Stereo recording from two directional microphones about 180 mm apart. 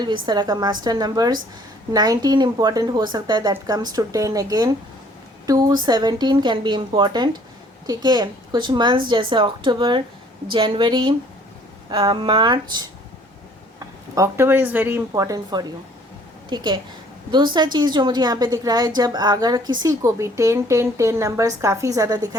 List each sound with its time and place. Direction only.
0.0 s a woman's voice: 25° right (ahead or behind)